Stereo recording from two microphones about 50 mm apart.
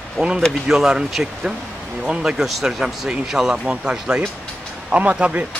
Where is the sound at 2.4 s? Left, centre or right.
Centre.